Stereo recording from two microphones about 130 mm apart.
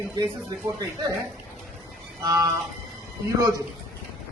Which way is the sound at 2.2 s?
25° right (ahead or behind).